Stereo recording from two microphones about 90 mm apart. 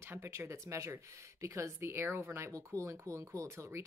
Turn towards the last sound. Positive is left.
turn(degrees=-30)  # may be behind; listen again after turning